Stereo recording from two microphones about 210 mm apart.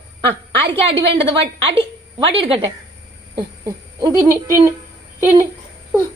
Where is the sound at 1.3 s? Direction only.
25° right (ahead or behind).